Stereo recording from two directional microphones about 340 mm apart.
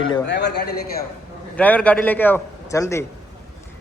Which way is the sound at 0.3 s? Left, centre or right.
Left.